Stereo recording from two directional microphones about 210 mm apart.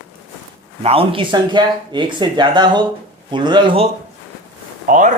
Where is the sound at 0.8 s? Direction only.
25° right (ahead or behind).